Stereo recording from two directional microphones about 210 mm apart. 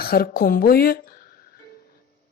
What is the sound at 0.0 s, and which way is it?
A woman's voice, 45° left (ahead or behind).